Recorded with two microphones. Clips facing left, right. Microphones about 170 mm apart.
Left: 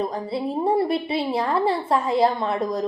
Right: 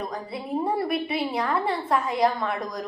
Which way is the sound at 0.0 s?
30° left (ahead or behind).